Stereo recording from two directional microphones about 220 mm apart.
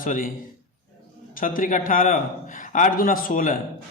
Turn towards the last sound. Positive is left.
turn(degrees=40)  # may be behind; listen again after turning